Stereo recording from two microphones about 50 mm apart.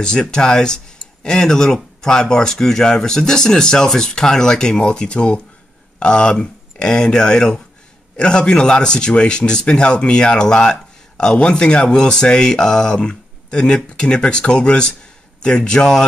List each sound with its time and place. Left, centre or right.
0.0 s speech: centre